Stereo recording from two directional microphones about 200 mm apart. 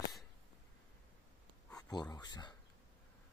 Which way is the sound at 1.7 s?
20° left (ahead or behind).